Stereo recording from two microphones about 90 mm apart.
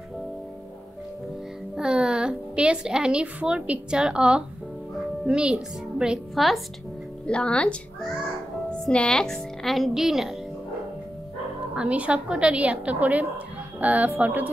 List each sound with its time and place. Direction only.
1.8 s a woman's voice: 10° right (ahead or behind)
7.2 s speech: 10° left (ahead or behind)
8.8 s speech: 10° left (ahead or behind)
11.7 s a woman's voice: 15° right (ahead or behind)